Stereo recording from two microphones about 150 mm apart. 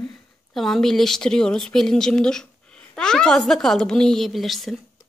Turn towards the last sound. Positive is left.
turn(degrees=0)  # may be behind; listen again after turning